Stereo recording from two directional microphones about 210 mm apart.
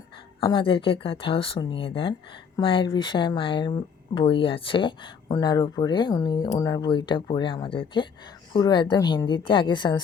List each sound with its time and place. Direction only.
0.3 s speech: 25° left (ahead or behind)